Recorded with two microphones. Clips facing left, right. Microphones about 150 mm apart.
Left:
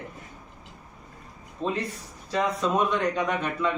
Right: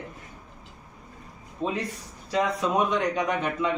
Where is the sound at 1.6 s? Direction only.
15° right (ahead or behind).